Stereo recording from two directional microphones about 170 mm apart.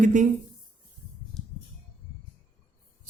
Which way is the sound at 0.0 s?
45° right (ahead or behind).